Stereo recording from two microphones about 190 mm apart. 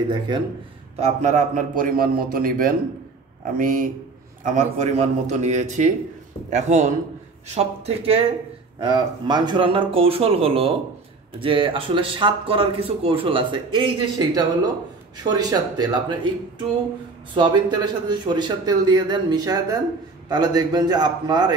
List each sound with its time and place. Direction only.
0.9 s a man's voice: 35° right (ahead or behind)